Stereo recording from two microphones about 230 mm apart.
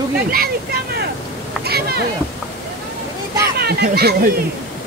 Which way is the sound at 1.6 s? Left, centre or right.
Right.